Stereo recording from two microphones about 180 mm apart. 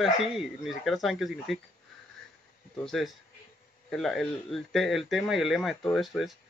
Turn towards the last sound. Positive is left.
turn(degrees=0)  # may be behind; listen again after turning